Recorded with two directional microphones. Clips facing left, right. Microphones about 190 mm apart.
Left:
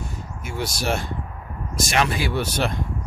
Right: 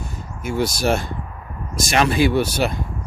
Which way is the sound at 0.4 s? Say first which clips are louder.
Right 6 dB; 45° right (ahead or behind).